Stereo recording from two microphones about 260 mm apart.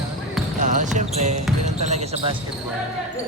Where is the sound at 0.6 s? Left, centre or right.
Right.